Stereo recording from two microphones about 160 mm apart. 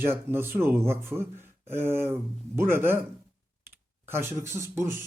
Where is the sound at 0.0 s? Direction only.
15° right (ahead or behind).